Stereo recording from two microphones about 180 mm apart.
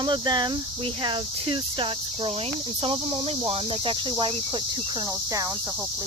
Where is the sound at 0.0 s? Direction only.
25° right (ahead or behind).